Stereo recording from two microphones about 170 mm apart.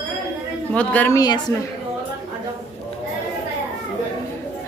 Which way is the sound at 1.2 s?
25° left (ahead or behind).